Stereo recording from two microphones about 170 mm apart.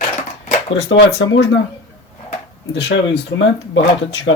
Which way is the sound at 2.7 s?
90° left.